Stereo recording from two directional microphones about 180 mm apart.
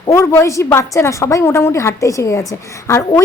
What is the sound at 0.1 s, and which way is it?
A woman's voice, 15° left (ahead or behind).